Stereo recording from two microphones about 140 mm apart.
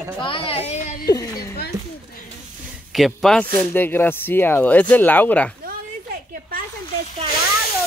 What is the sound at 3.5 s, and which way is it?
Speech, 15° left (ahead or behind).